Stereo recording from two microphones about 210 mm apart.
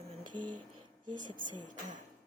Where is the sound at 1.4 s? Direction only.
20° right (ahead or behind).